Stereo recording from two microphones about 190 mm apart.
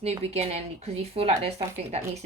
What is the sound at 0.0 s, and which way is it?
Speech, 30° right (ahead or behind).